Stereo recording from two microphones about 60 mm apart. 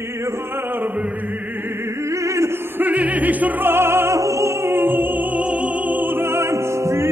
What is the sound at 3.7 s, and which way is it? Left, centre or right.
Music, right.